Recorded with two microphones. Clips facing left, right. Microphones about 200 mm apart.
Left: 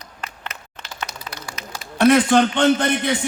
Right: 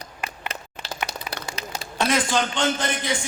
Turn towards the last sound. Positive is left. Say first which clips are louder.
# left 7 dB
turn(degrees=60)  # may be behind; listen again after turning